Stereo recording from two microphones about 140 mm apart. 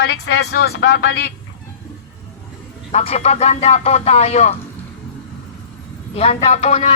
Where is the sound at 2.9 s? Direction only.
50° left (ahead or behind).